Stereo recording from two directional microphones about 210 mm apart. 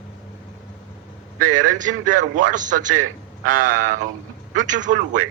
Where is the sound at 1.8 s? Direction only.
40° right (ahead or behind).